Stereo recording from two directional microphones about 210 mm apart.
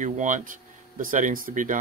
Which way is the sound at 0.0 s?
35° right (ahead or behind).